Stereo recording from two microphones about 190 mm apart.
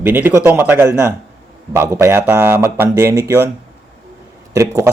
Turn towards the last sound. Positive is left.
turn(degrees=-15)  # may be behind; listen again after turning